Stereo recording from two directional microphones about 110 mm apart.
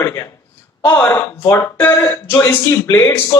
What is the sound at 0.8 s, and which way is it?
Speech, 15° left (ahead or behind).